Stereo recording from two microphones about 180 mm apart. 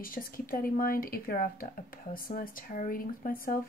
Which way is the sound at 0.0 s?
50° left (ahead or behind).